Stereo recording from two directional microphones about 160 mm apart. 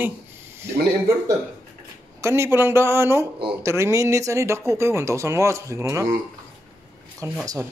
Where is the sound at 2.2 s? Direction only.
15° right (ahead or behind).